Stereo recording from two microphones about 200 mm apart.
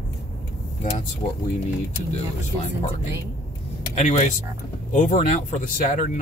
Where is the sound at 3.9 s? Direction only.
35° left (ahead or behind).